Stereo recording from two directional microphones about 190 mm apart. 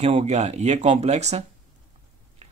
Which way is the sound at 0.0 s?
35° right (ahead or behind).